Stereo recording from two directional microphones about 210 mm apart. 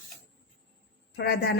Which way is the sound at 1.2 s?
50° left (ahead or behind).